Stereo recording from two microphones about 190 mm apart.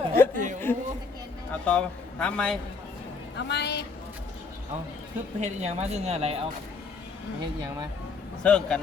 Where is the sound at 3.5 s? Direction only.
60° left (ahead or behind).